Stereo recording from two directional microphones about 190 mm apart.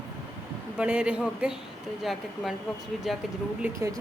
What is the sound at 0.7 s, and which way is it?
A man's voice, 5° right (ahead or behind).